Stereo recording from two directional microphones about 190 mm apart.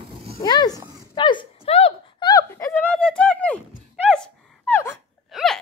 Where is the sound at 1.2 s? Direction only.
25° left (ahead or behind).